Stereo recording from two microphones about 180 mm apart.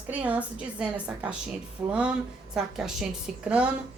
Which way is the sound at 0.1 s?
5° right (ahead or behind).